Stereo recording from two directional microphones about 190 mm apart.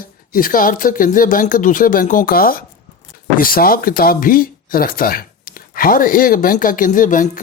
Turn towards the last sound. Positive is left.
turn(degrees=45)  # may be behind; listen again after turning